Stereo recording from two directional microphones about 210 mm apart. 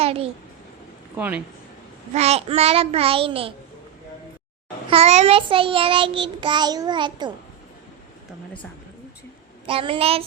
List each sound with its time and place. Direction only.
0.0 s a child's voice: 30° right (ahead or behind)
1.1 s speech: 10° right (ahead or behind)
2.1 s child singing: 30° right (ahead or behind)
4.9 s child singing: 30° right (ahead or behind)
9.6 s child singing: 25° right (ahead or behind)